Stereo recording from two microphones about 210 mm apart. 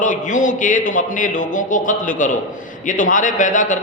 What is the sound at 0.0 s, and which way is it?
A man's voice, 35° left (ahead or behind).